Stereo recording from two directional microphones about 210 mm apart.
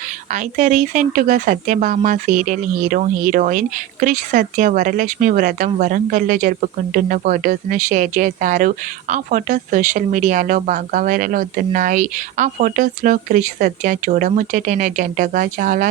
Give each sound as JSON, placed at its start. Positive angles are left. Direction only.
{"t": 0.3, "sound": "speech", "side_deg": -35}